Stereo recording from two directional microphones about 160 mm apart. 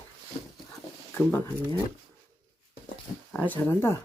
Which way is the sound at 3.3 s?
10° left (ahead or behind).